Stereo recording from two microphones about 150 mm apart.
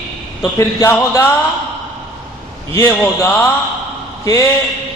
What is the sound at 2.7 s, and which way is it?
Speech, 15° left (ahead or behind).